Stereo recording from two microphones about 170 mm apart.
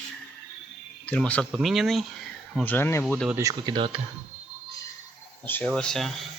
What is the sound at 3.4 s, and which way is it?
Speech, 20° right (ahead or behind).